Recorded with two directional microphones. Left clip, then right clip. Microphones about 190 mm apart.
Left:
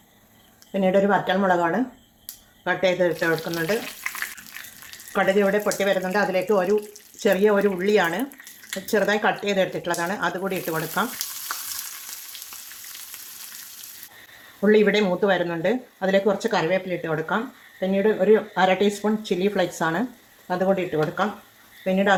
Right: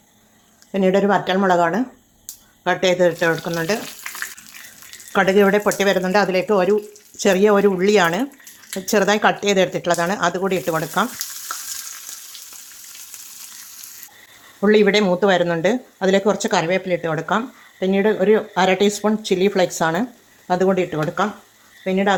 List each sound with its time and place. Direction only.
0.7 s speech: 40° right (ahead or behind)
5.1 s speech: 50° right (ahead or behind)
14.6 s speech: 40° right (ahead or behind)
21.8 s speech: 30° right (ahead or behind)